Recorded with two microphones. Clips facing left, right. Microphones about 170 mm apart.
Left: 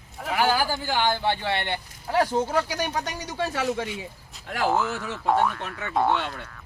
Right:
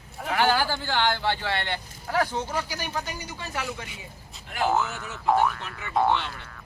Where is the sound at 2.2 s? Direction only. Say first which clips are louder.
Left 4 dB; 40° left (ahead or behind).